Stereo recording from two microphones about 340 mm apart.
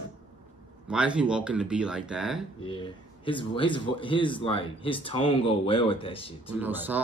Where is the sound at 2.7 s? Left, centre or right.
Centre.